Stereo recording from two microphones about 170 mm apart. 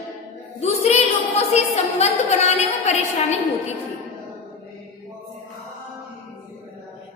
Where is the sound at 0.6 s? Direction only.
40° left (ahead or behind).